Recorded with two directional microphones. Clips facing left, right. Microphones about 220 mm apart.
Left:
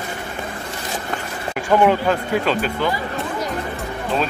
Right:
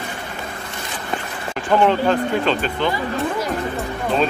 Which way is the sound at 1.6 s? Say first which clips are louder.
Even; 10° left (ahead or behind).